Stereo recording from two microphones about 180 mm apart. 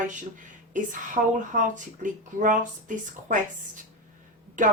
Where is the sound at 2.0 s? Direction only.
45° right (ahead or behind).